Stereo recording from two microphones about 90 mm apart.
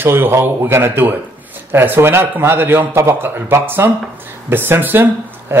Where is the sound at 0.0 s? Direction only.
25° right (ahead or behind).